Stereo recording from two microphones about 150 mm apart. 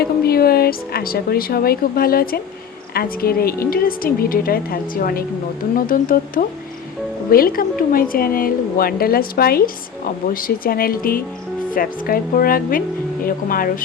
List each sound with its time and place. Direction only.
0.0 s a woman's voice: 90° left
5.7 s speech: 70° left (ahead or behind); by 9.6 s 85° left
10.2 s speech: 75° left (ahead or behind)